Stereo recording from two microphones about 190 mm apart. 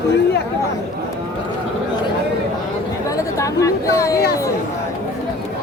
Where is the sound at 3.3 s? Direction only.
15° left (ahead or behind).